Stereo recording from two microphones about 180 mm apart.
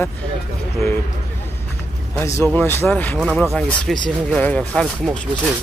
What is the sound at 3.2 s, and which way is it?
Speech, 5° right (ahead or behind).